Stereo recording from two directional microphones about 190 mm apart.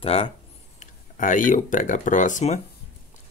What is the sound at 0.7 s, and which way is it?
Speech, 45° left (ahead or behind).